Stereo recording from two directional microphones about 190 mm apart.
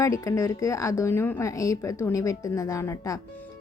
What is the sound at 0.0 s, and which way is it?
Speech, 15° left (ahead or behind).